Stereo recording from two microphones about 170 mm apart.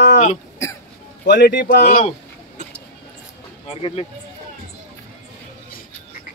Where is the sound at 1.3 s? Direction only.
85° left.